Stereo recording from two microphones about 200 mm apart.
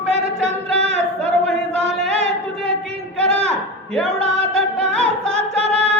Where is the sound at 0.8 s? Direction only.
30° right (ahead or behind).